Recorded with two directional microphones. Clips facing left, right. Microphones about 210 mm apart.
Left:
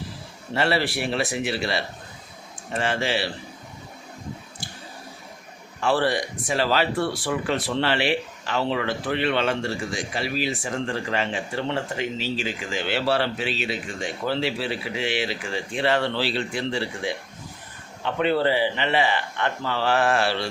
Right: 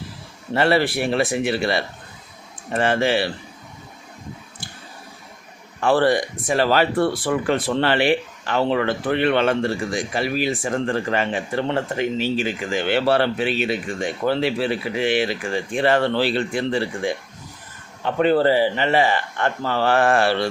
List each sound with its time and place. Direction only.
0.5 s speech: 55° right (ahead or behind)
5.8 s speech: 50° right (ahead or behind)